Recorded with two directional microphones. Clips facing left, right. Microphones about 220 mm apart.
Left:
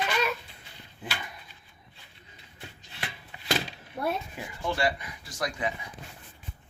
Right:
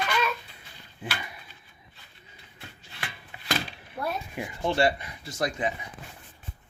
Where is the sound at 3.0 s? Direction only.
25° left (ahead or behind).